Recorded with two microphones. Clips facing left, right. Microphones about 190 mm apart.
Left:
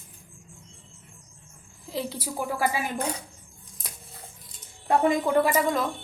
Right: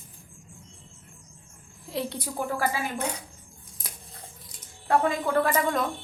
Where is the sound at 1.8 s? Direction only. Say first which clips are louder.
Even; centre (ahead or behind).